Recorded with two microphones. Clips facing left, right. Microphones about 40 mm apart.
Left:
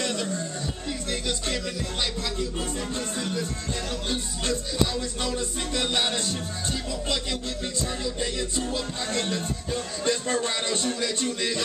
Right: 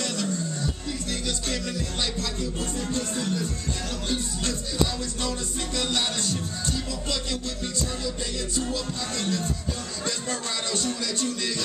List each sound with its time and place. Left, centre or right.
0.0 s music: centre
2.9 s speech: left
5.8 s speech: left
8.7 s music: left
10.0 s speech: left